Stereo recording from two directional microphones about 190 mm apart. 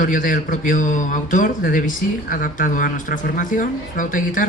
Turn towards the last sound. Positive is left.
turn(degrees=45)  # may be behind; listen again after turning